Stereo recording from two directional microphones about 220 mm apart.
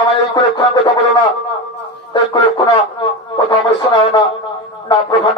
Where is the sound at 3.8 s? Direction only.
20° left (ahead or behind).